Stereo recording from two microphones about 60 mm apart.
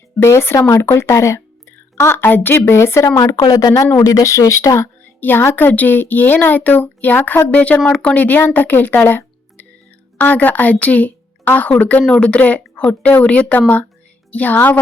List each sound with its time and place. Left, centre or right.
0.2 s speech: left
2.0 s speech: left
3.2 s speech: left
3.9 s speech: left
5.2 s a woman's voice: left